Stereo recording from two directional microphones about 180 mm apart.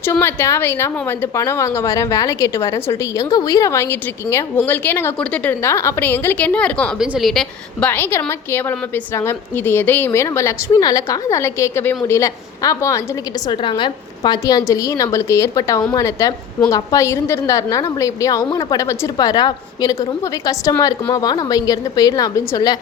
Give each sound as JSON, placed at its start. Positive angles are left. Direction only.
{"t": 0.0, "sound": "a woman's voice", "side_deg": 15}